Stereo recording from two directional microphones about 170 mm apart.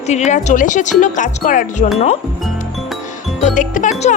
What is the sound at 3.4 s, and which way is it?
Speech, 45° left (ahead or behind).